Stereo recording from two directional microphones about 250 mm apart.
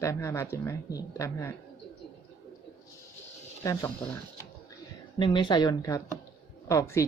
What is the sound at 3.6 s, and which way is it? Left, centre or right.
Speech, centre.